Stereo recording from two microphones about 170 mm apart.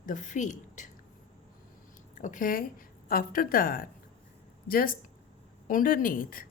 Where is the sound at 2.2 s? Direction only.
50° left (ahead or behind).